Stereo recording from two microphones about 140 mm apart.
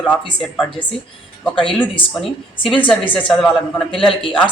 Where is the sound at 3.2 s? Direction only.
5° left (ahead or behind).